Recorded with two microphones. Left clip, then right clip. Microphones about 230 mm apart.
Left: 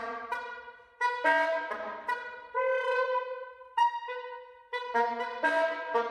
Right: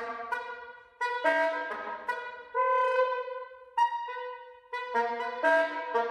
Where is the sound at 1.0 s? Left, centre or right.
Centre.